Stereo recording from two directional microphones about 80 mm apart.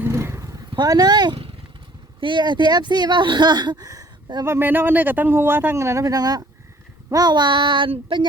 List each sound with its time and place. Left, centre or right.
0.0 s vehicle: right
0.4 s vehicle: right
0.9 s speech: right
2.2 s speech: right
4.4 s speech: right
5.7 s speech: right